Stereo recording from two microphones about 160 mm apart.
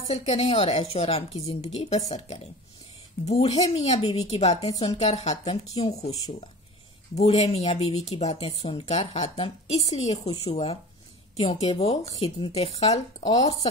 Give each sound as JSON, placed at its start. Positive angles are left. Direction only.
{"t": 0.1, "sound": "speech", "side_deg": 40}
{"t": 7.2, "sound": "speech", "side_deg": 40}